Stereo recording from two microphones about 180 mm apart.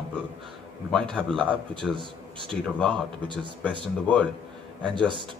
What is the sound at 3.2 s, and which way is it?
Speech, 25° right (ahead or behind).